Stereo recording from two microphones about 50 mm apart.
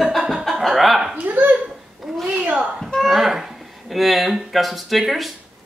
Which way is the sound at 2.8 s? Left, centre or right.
Centre.